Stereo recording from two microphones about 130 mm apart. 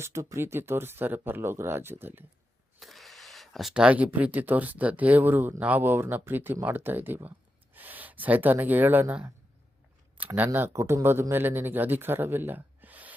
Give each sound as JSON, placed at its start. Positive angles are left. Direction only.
{"t": 0.0, "sound": "speech", "side_deg": -20}
{"t": 2.8, "sound": "speech", "side_deg": 0}